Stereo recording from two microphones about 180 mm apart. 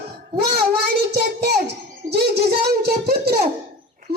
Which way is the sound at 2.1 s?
65° right (ahead or behind).